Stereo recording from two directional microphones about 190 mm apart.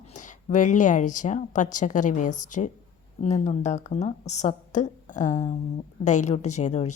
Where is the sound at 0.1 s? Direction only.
40° left (ahead or behind).